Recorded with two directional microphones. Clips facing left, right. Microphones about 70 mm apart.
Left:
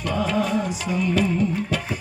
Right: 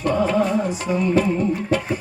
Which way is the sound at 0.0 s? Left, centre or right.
Right.